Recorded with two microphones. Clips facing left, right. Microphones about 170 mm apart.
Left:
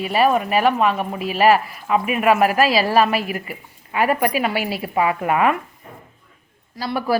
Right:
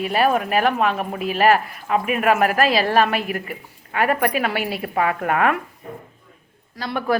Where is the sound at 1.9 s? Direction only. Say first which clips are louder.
Left 2 dB; 45° right (ahead or behind).